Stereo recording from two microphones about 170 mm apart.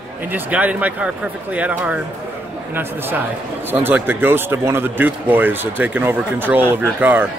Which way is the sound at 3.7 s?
10° right (ahead or behind).